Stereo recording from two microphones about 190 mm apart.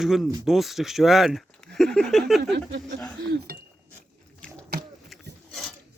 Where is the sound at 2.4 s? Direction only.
65° right (ahead or behind).